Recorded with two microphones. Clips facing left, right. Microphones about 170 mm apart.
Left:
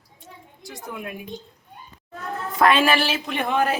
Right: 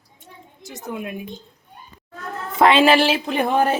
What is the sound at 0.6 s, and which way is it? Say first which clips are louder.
Speech: right 4 dB; 20° right (ahead or behind).